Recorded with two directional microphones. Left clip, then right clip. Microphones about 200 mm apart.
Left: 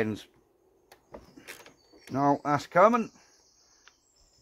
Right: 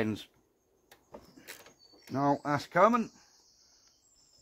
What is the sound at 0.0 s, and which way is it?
Speech, 20° right (ahead or behind).